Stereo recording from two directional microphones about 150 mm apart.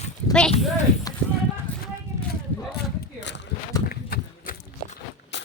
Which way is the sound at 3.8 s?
90° left.